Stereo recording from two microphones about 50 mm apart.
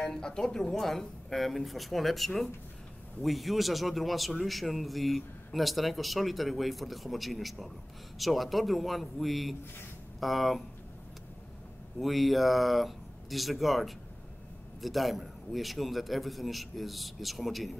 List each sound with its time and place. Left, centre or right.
0.0 s a man's voice: centre
12.0 s a man's voice: centre